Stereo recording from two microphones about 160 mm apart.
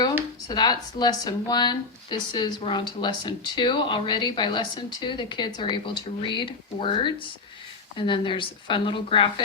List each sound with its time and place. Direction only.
0.4 s a woman's voice: 25° left (ahead or behind)